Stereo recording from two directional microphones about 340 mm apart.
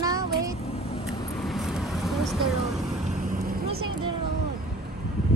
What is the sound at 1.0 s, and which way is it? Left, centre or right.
Vehicle, centre.